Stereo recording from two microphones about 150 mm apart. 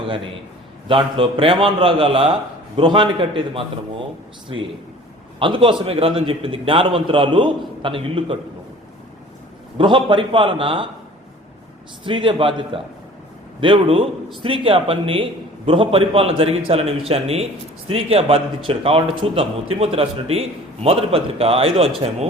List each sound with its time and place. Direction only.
0.9 s a man's voice: 35° right (ahead or behind)
9.7 s a man's voice: 35° right (ahead or behind)
12.0 s a man's voice: 35° right (ahead or behind)